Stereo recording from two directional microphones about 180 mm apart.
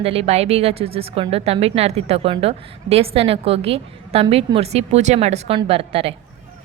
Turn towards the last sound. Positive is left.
turn(degrees=-30)  # may be behind; listen again after turning